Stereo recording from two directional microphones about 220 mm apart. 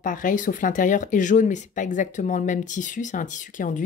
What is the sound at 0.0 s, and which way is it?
Speech, 35° left (ahead or behind).